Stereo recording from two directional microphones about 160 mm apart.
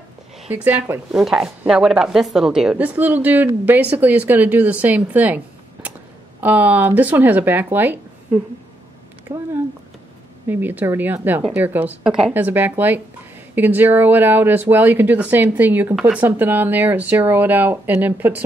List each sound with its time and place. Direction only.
0.5 s a woman's voice: 15° right (ahead or behind)
1.1 s a woman's voice: 5° right (ahead or behind)
9.3 s a woman's voice: 15° right (ahead or behind)
10.5 s a woman's voice: 10° right (ahead or behind)